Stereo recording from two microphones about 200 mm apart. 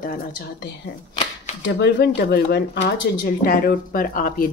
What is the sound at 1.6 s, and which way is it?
Speech, 55° left (ahead or behind).